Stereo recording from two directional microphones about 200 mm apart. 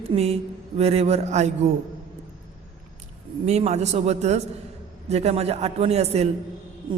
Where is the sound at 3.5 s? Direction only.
35° right (ahead or behind).